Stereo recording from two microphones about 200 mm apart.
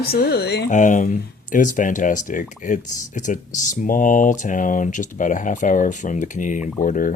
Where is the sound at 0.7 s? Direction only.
40° left (ahead or behind).